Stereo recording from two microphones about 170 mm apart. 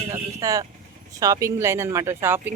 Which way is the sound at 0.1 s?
20° right (ahead or behind).